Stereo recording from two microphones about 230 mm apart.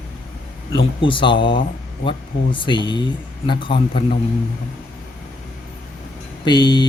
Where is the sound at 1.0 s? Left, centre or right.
Left.